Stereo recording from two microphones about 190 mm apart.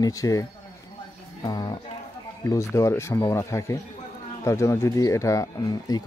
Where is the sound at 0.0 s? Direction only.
20° left (ahead or behind).